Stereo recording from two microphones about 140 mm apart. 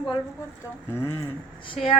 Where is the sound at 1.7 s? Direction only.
45° left (ahead or behind).